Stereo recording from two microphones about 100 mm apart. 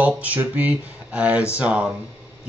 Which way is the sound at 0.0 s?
15° right (ahead or behind).